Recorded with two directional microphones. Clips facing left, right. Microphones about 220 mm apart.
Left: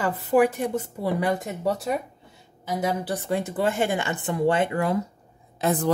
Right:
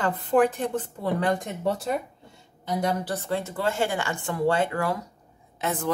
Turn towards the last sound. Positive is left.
turn(degrees=35)  # may be behind; listen again after turning